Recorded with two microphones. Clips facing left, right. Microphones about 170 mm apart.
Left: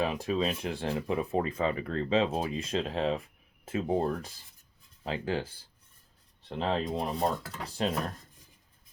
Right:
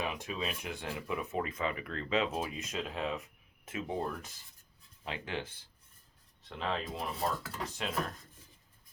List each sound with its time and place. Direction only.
0.0 s speech: 35° left (ahead or behind)